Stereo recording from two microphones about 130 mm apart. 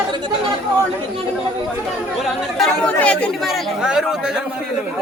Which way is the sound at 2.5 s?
5° left (ahead or behind).